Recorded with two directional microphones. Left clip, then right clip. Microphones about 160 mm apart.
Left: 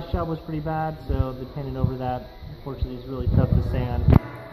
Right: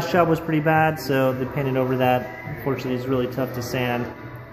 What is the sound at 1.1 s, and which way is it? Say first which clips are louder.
Speech: right 11 dB; 30° right (ahead or behind).